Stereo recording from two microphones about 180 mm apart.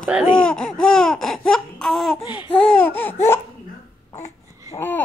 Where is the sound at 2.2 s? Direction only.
30° left (ahead or behind).